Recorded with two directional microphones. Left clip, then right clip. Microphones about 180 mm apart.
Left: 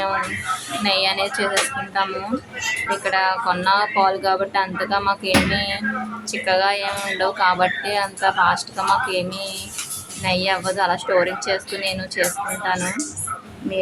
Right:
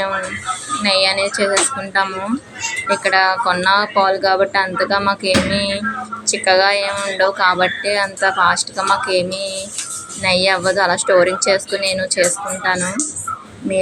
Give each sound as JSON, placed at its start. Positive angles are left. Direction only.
{"t": 0.8, "sound": "a woman's voice", "side_deg": -15}